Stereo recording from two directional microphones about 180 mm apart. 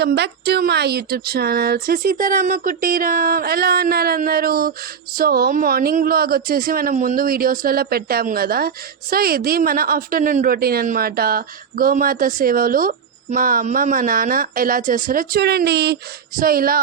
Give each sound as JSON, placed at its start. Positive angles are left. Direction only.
{"t": 0.0, "sound": "speech", "side_deg": -65}